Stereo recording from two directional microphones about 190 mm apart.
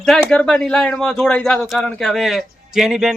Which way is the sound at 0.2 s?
5° left (ahead or behind).